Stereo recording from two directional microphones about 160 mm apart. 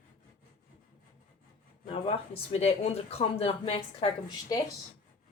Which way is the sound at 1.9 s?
40° left (ahead or behind).